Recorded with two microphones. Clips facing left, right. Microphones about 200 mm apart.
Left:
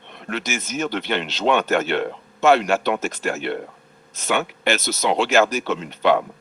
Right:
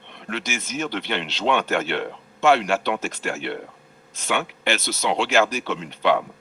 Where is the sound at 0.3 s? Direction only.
45° left (ahead or behind).